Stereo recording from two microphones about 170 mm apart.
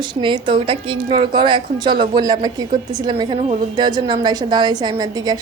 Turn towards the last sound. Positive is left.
turn(degrees=-25)  # may be behind; listen again after turning